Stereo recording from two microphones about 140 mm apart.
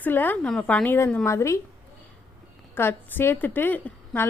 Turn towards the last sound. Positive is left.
turn(degrees=15)  # may be behind; listen again after turning